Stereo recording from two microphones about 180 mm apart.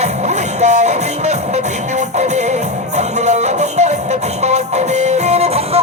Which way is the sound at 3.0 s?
40° right (ahead or behind).